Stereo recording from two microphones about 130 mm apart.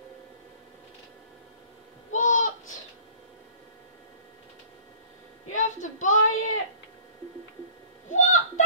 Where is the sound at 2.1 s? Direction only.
70° left (ahead or behind).